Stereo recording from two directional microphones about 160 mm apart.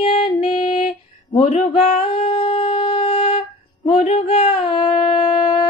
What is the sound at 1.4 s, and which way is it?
Speech, 40° left (ahead or behind).